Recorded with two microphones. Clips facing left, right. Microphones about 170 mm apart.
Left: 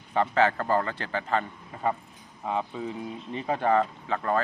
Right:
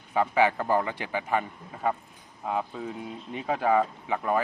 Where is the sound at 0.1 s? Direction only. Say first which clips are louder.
Even; 10° right (ahead or behind).